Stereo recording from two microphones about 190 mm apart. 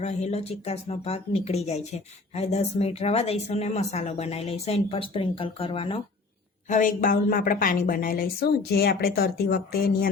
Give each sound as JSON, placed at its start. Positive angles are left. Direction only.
{"t": 0.0, "sound": "speech", "side_deg": 35}
{"t": 6.7, "sound": "a woman's voice", "side_deg": 45}